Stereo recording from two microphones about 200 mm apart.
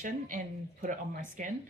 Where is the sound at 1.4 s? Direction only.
40° right (ahead or behind).